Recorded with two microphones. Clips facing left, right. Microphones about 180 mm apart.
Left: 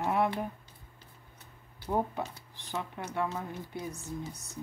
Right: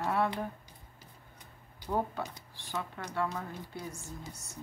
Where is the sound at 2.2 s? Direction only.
15° left (ahead or behind).